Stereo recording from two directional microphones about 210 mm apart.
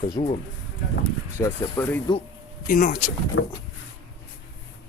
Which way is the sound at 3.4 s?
80° left.